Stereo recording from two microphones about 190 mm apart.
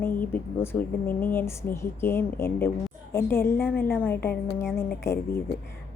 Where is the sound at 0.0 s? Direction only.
10° left (ahead or behind).